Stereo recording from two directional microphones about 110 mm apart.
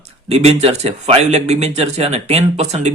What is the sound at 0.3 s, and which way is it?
Speech, 65° right (ahead or behind).